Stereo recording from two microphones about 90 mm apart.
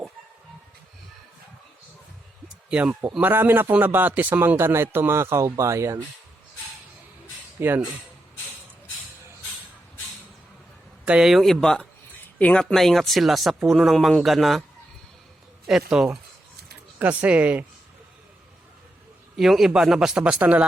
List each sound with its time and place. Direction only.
2.6 s a man's voice: 10° right (ahead or behind); by 6.0 s 35° right (ahead or behind)
7.6 s a man's voice: 25° right (ahead or behind)
11.0 s speech: 10° right (ahead or behind)
15.6 s speech: 5° right (ahead or behind)
19.4 s speech: 5° right (ahead or behind)